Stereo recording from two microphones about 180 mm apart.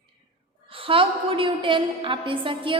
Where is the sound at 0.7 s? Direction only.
30° right (ahead or behind).